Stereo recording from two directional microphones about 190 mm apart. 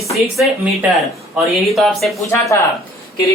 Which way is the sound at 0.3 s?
5° right (ahead or behind).